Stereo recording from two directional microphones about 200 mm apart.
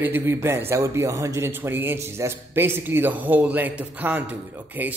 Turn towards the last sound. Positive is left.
turn(degrees=-10)  # may be behind; listen again after turning